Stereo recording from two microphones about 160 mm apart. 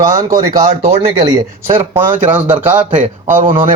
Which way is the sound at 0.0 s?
20° right (ahead or behind).